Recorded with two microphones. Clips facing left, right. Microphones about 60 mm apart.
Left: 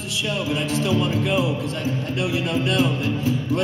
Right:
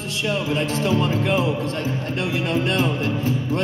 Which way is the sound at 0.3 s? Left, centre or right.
Right.